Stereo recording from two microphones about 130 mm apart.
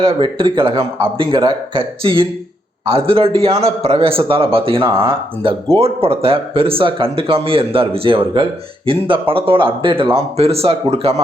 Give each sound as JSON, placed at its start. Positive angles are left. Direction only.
{"t": 0.0, "sound": "speech", "side_deg": -45}